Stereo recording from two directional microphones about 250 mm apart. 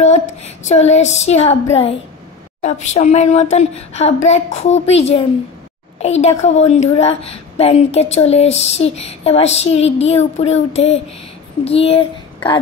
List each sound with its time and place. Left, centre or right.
0.0 s a woman's voice: left